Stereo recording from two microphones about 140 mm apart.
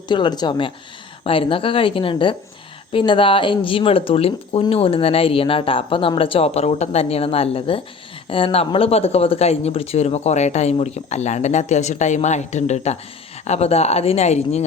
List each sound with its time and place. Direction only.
0.1 s speech: 30° left (ahead or behind); by 14.6 s 50° left (ahead or behind)